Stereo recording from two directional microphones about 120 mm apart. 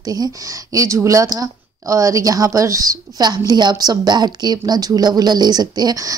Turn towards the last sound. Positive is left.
turn(degrees=-30)  # may be behind; listen again after turning